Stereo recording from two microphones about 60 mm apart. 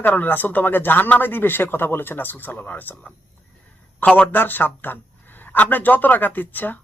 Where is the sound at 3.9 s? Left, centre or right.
Left.